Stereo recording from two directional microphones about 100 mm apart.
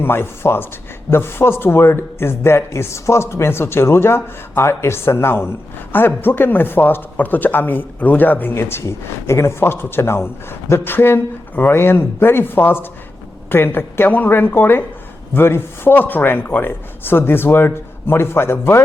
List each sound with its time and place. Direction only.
0.0 s speech: 25° left (ahead or behind)